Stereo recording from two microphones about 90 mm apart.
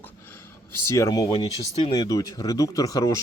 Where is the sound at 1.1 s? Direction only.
40° left (ahead or behind).